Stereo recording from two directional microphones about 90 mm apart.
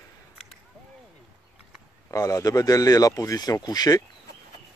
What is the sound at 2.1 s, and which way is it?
Speech, 35° left (ahead or behind).